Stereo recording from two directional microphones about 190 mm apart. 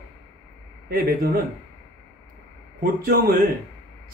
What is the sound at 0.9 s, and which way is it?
Speech, 50° right (ahead or behind).